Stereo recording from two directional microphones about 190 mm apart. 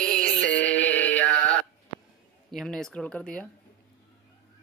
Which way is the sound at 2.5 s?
Centre (ahead or behind).